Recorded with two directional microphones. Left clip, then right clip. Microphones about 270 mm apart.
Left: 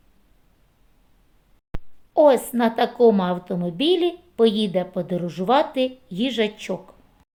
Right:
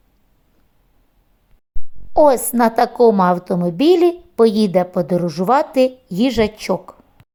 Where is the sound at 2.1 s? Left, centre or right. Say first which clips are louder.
Right 3 dB; right.